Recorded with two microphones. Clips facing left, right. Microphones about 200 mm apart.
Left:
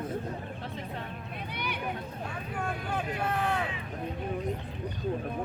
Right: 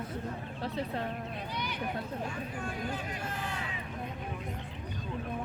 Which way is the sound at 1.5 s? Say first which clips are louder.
Left 1 dB; 60° left (ahead or behind).